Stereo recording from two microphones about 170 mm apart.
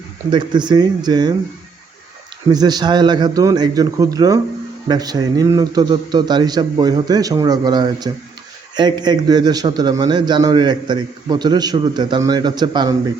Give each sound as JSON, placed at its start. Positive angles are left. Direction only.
{"t": 0.3, "sound": "a man's voice", "side_deg": -25}
{"t": 2.5, "sound": "a man's voice", "side_deg": -25}